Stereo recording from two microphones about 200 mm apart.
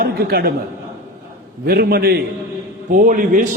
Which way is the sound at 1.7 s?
50° right (ahead or behind).